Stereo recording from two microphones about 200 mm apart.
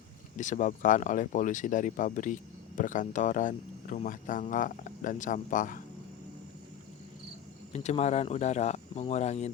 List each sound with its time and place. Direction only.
0.3 s speech: 40° left (ahead or behind)
7.7 s speech: 35° left (ahead or behind)